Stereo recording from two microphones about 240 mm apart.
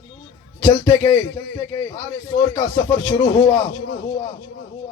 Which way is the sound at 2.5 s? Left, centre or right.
Centre.